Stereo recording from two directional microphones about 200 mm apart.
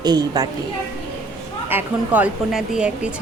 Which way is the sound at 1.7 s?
10° right (ahead or behind).